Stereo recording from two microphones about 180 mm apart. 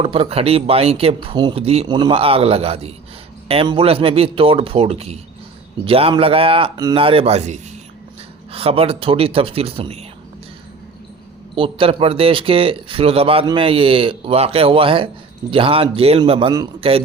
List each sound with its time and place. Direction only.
0.0 s speech: 30° right (ahead or behind)
11.5 s speech: 30° right (ahead or behind)